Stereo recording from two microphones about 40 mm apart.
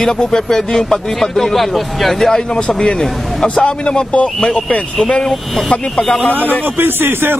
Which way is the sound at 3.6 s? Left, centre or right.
Left.